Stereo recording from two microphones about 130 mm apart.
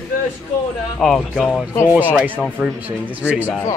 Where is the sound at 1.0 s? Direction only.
Centre (ahead or behind).